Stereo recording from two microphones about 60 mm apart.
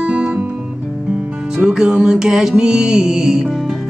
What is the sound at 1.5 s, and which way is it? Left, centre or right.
Music, centre.